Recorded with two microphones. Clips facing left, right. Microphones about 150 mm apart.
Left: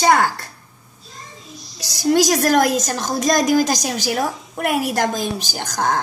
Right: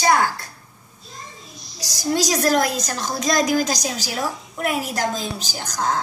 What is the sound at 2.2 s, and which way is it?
A woman's voice, 55° left (ahead or behind).